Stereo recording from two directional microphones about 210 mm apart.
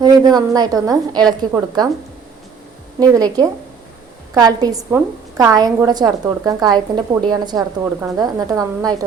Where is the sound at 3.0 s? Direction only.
15° right (ahead or behind).